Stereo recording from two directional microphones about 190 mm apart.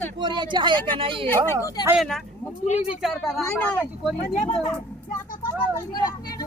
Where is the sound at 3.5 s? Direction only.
10° left (ahead or behind).